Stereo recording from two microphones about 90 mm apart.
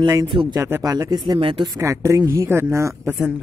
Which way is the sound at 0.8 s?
40° right (ahead or behind).